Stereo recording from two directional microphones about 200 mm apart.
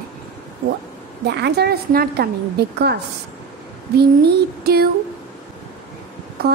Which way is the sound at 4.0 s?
55° right (ahead or behind).